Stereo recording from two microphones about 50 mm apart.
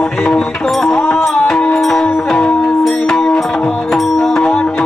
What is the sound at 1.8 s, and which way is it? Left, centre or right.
Music, centre.